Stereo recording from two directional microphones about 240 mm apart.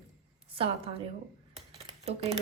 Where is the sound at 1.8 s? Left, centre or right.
Right.